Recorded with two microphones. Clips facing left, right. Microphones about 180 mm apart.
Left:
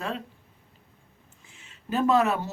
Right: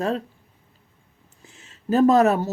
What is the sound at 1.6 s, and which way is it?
Speech, 40° right (ahead or behind).